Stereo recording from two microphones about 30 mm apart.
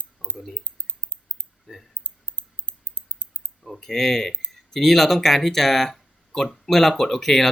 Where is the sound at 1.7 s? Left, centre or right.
Centre.